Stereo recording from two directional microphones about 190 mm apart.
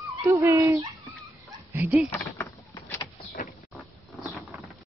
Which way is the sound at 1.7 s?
5° right (ahead or behind).